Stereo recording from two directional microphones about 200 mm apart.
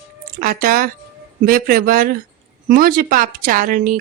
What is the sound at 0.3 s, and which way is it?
Speech, 45° right (ahead or behind).